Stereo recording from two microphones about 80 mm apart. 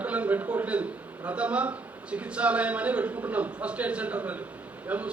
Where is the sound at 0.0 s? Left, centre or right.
Centre.